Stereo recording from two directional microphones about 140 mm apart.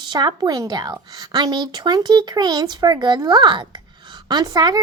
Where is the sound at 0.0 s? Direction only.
30° right (ahead or behind).